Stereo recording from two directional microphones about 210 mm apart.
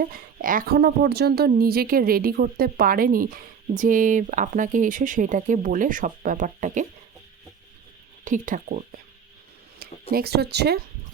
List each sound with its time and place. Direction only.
0.0 s a woman's voice: 40° right (ahead or behind)
8.2 s a woman's voice: 40° right (ahead or behind)